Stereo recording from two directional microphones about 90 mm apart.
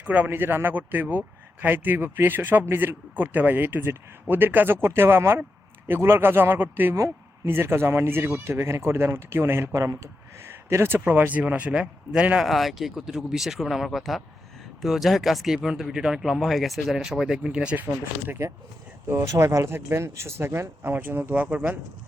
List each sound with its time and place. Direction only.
0.0 s a man's voice: 15° right (ahead or behind)
12.5 s a man's voice: centre (ahead or behind); by 21.4 s 25° right (ahead or behind)
21.4 s a man's voice: 15° right (ahead or behind)